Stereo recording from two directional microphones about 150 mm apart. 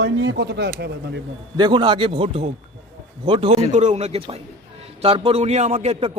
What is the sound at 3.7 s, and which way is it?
A man's voice, 50° right (ahead or behind).